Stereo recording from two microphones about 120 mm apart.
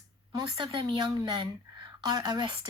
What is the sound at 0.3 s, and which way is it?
A woman's voice, 40° right (ahead or behind).